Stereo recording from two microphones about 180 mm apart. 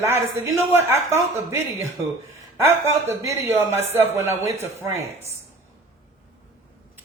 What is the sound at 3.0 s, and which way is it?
Speech, 15° right (ahead or behind).